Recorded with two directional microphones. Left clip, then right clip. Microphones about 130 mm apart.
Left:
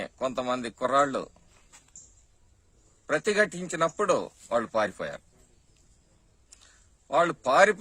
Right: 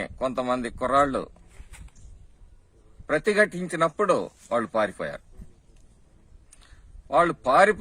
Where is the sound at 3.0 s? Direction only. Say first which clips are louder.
Right 3 dB; 20° left (ahead or behind).